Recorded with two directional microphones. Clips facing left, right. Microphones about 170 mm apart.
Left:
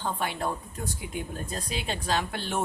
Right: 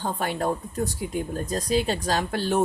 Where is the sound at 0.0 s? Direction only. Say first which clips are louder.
Right 4 dB; 40° right (ahead or behind).